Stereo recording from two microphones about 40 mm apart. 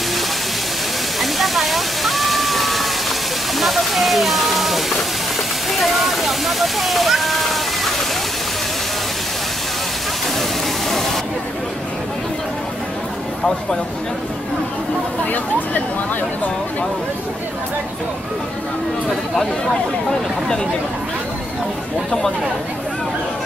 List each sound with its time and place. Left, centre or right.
1.2 s waterfall: centre
3.5 s a sound: centre
5.7 s waterfall: centre
19.0 s speech: centre
20.1 s speech: centre